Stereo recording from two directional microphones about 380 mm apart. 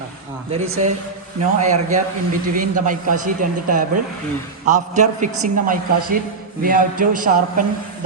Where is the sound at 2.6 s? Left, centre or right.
Right.